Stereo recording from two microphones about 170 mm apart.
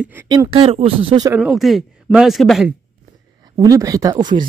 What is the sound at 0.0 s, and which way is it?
Speech, 10° right (ahead or behind).